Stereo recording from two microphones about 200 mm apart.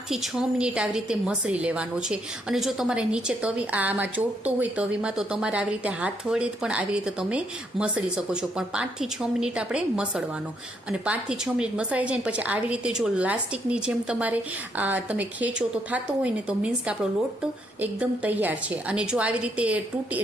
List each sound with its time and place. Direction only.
0.1 s a woman's voice: 5° right (ahead or behind)